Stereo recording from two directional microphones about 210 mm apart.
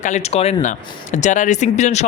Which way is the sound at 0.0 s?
35° left (ahead or behind).